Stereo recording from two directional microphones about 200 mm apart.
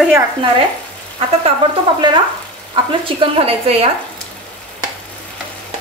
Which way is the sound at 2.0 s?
20° right (ahead or behind).